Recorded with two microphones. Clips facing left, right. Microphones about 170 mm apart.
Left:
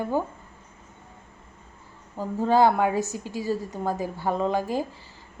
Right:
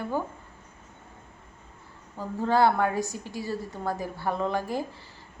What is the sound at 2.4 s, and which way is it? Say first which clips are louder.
Speech: left 3 dB; 15° left (ahead or behind).